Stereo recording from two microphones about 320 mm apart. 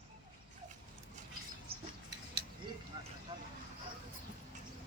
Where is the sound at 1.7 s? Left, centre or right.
Right.